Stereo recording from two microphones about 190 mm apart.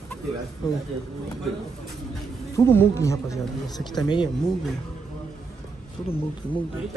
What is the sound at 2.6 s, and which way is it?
A man's voice, 15° left (ahead or behind).